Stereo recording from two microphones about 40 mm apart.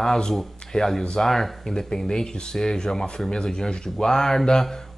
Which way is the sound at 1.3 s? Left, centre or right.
Centre.